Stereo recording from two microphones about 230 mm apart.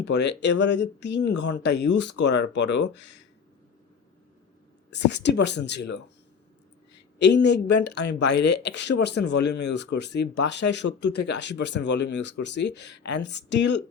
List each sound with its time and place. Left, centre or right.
0.0 s speech: left
4.9 s speech: left
7.2 s speech: left